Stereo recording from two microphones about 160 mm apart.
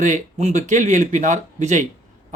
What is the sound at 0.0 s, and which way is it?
Speech, 45° right (ahead or behind).